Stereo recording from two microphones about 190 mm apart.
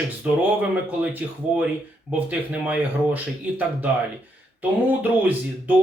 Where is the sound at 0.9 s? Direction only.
10° right (ahead or behind).